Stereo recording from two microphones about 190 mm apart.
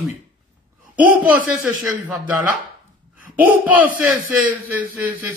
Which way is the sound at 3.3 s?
10° right (ahead or behind).